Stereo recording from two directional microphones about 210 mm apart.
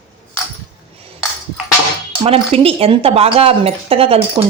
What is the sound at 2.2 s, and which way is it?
Speech, 30° right (ahead or behind).